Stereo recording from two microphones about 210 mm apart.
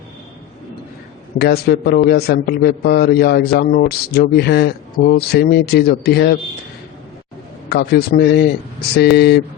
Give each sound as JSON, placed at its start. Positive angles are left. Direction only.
{"t": 1.4, "sound": "a man's voice", "side_deg": 50}
{"t": 7.7, "sound": "a man's voice", "side_deg": 50}